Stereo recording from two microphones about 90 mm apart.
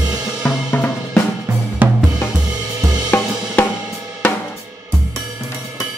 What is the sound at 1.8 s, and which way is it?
Drum kit, 20° right (ahead or behind).